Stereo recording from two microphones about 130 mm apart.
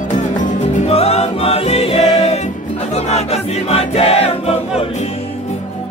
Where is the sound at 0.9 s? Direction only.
55° left (ahead or behind).